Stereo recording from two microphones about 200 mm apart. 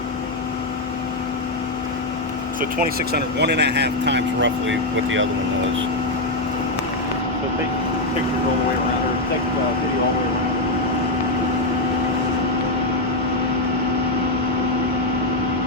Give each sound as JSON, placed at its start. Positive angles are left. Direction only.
{"t": 2.6, "sound": "speech", "side_deg": -45}